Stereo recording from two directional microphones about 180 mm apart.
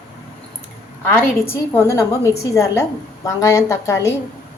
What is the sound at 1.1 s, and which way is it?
A woman's voice, 15° left (ahead or behind).